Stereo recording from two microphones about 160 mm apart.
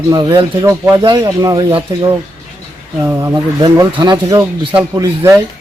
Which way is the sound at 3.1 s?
20° right (ahead or behind).